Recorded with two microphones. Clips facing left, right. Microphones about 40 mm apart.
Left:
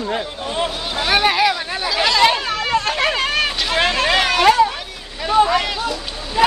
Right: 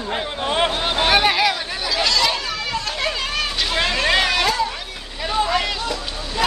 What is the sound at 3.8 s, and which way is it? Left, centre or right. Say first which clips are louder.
Vehicle: left 4 dB; left.